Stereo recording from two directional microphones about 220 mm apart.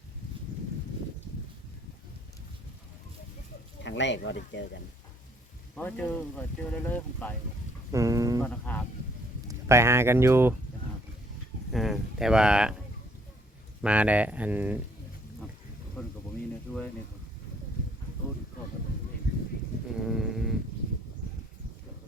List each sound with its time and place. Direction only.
3.8 s speech: 55° left (ahead or behind)
5.7 s speech: 5° left (ahead or behind)
7.9 s speech: 15° right (ahead or behind)
8.4 s speech: 5° left (ahead or behind)
9.5 s speech: 10° right (ahead or behind)
11.7 s speech: centre (ahead or behind)
13.8 s speech: 5° right (ahead or behind)
16.0 s a sound: 10° left (ahead or behind)
20.1 s sheep: centre (ahead or behind)